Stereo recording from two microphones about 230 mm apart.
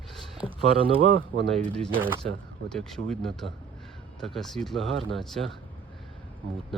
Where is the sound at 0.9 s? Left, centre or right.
Right.